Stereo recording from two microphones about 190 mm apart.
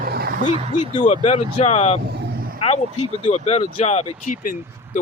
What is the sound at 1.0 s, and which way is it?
Speech, 35° left (ahead or behind).